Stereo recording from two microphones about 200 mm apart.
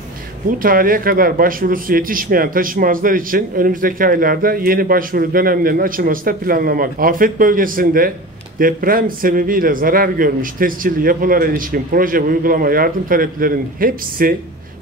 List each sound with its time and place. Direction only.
0.6 s speech: 45° right (ahead or behind)